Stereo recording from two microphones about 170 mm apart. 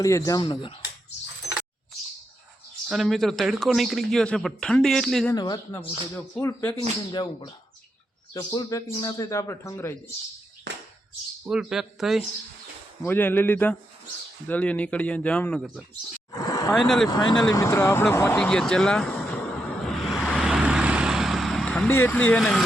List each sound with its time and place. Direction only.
0.0 s a man's voice: 20° left (ahead or behind)
2.9 s a man's voice: centre (ahead or behind)
5.3 s a man's voice: 20° left (ahead or behind)
7.1 s a man's voice: 25° left (ahead or behind)
11.4 s a man's voice: 5° right (ahead or behind)
13.0 s speech: 10° left (ahead or behind)
16.3 s vehicle: 20° left (ahead or behind)
16.7 s a man's voice: centre (ahead or behind)
17.1 s a man's voice: 25° left (ahead or behind)
18.1 s vehicle: 15° left (ahead or behind)